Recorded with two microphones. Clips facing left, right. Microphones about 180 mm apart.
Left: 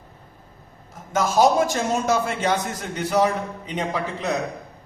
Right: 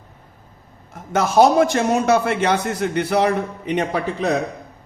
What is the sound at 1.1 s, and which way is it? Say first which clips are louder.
A man's voice: right 4 dB; 65° right (ahead or behind).